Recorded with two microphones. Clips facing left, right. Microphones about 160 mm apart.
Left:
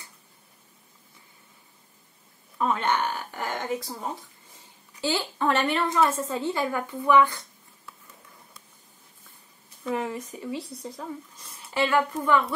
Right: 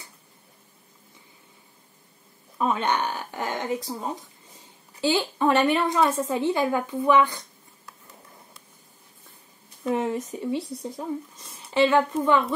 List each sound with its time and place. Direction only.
2.6 s speech: 15° right (ahead or behind)
9.8 s a sound: 20° right (ahead or behind)
10.4 s speech: 15° right (ahead or behind)